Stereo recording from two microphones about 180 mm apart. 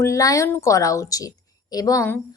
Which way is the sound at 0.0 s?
20° left (ahead or behind).